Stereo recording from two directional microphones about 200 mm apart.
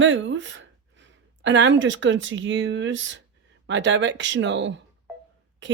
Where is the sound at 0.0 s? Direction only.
70° right (ahead or behind).